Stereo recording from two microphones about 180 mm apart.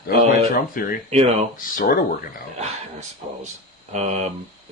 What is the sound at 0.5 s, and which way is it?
Speech, 55° left (ahead or behind).